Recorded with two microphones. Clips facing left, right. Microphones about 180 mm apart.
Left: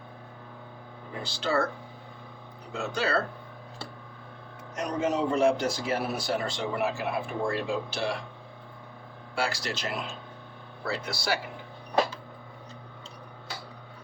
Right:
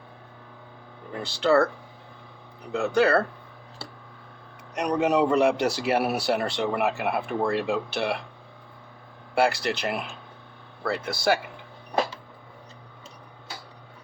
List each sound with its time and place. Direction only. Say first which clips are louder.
1.2 s speech: right 7 dB; 60° right (ahead or behind)
2.7 s speech: right 7 dB; 60° right (ahead or behind)
4.7 s a man's voice: right 5 dB; 65° right (ahead or behind)
9.3 s speech: right 8 dB; 60° right (ahead or behind)